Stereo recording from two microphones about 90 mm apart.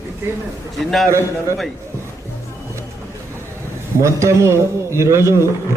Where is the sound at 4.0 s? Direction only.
35° right (ahead or behind).